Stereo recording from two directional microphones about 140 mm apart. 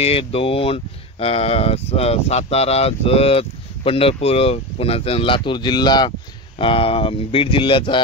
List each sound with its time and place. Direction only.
0.0 s speech: 45° left (ahead or behind)